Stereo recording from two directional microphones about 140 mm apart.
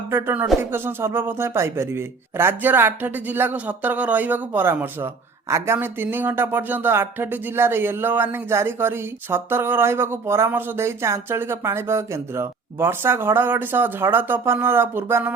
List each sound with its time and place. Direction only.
0.1 s a man's voice: 15° right (ahead or behind)